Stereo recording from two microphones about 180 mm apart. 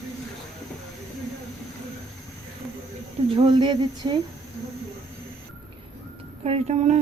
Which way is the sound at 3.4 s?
25° right (ahead or behind).